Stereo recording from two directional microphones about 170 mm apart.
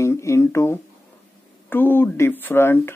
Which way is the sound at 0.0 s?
15° left (ahead or behind).